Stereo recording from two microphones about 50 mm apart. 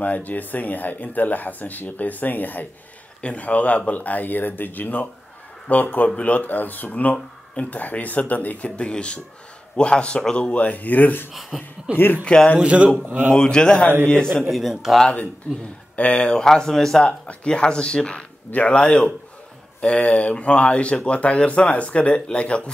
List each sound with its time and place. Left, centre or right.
0.0 s speech: left
3.2 s speech: left
11.5 s speech: centre
11.9 s speech: right
12.3 s speech: centre
12.5 s speech: right
13.4 s speech: centre
14.5 s speech: centre
16.0 s speech: left; by 17.0 s centre
17.0 s speech: left